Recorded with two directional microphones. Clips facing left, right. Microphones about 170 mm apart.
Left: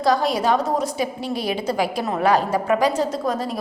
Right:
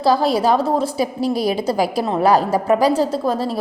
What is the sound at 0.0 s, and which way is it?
A woman's voice, 30° right (ahead or behind).